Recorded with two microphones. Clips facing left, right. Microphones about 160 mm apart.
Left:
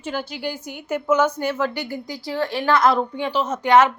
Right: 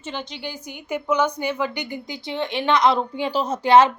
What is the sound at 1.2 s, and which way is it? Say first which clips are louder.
A woman's voice: left 2 dB; 15° right (ahead or behind).